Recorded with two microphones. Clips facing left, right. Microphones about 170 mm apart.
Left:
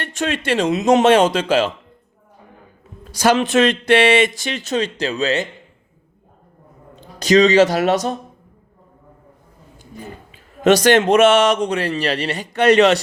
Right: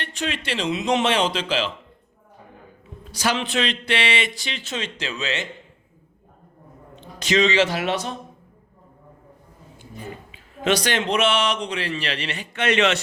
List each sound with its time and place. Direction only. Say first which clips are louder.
0.0 s speech: left 6 dB; 45° left (ahead or behind)
3.1 s speech: left 9 dB; 45° left (ahead or behind)
6.9 s speech: left 8 dB; 40° left (ahead or behind)
10.6 s speech: left 9 dB; 45° left (ahead or behind)